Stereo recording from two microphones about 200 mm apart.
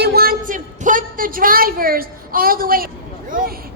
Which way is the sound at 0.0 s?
50° right (ahead or behind).